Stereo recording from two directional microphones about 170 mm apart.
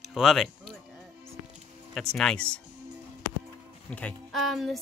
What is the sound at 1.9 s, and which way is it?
Speech, 5° left (ahead or behind).